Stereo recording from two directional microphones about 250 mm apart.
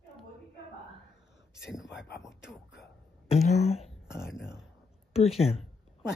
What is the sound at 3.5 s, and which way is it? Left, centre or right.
Speech, left.